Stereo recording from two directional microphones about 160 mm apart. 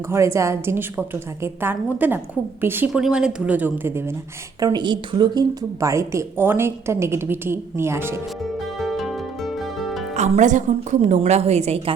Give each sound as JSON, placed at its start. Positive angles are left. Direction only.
{"t": 0.1, "sound": "a woman's voice", "side_deg": -20}
{"t": 4.6, "sound": "a woman's voice", "side_deg": -30}
{"t": 8.8, "sound": "music", "side_deg": 0}
{"t": 10.2, "sound": "a woman's voice", "side_deg": -50}